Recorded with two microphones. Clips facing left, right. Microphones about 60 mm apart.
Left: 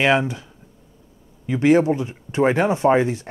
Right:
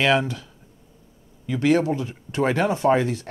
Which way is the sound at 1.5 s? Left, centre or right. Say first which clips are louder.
Left 4 dB; left.